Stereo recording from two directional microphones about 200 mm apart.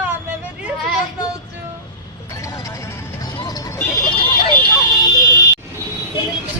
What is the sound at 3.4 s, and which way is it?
Vehicle, 20° left (ahead or behind).